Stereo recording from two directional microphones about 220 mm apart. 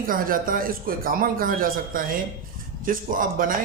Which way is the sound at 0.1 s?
40° right (ahead or behind).